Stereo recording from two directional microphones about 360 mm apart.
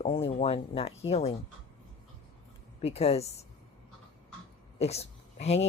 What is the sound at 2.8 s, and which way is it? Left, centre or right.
Speech, centre.